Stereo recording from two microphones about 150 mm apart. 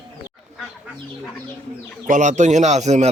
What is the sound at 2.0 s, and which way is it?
A man's voice, 55° right (ahead or behind).